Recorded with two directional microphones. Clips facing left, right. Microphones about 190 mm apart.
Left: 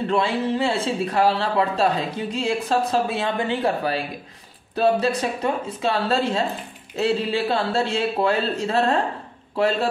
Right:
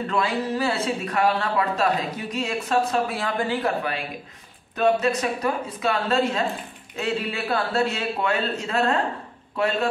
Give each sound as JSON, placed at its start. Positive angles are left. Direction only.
{"t": 0.1, "sound": "speech", "side_deg": 25}
{"t": 4.7, "sound": "speech", "side_deg": 30}